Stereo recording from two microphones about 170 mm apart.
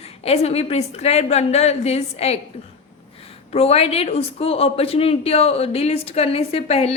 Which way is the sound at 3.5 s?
35° left (ahead or behind).